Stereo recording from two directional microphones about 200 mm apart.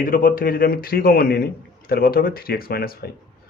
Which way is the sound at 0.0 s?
45° left (ahead or behind).